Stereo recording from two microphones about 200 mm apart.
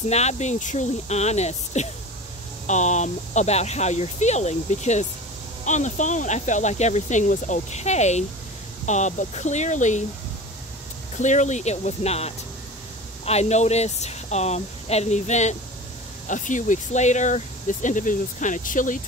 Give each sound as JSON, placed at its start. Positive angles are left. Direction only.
{"t": 0.1, "sound": "speech", "side_deg": 35}
{"t": 11.1, "sound": "speech", "side_deg": 35}